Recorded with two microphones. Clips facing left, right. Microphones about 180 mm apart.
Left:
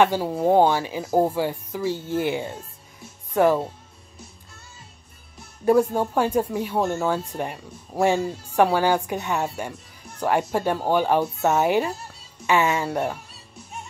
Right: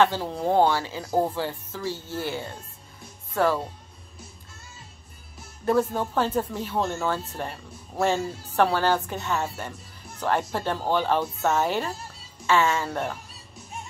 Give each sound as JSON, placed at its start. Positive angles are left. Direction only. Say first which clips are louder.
{"t": 0.0, "sound": "speech", "louder": "left 3 dB", "side_deg": 10}
{"t": 5.7, "sound": "speech", "louder": "left 4 dB", "side_deg": 10}